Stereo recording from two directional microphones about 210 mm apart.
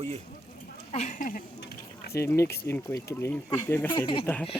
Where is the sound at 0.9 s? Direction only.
35° left (ahead or behind).